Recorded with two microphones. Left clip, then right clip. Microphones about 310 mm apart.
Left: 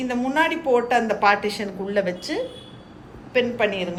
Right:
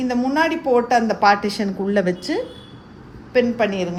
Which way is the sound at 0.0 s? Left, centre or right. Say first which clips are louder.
Right 2 dB; right.